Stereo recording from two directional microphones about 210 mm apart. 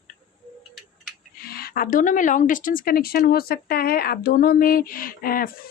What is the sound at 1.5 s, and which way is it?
A woman's voice, 45° left (ahead or behind).